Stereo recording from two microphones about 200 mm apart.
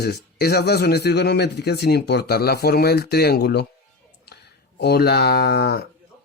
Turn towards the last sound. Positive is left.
turn(degrees=50)  # may be behind; listen again after turning